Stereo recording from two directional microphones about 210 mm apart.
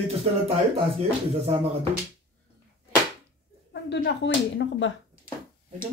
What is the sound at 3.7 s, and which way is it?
Speech, 55° left (ahead or behind).